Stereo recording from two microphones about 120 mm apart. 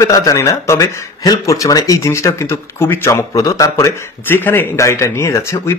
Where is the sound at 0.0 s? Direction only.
30° left (ahead or behind).